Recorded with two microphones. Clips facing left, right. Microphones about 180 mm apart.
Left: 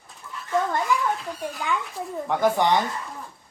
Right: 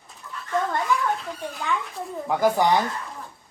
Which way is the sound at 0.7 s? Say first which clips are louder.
Even; centre (ahead or behind).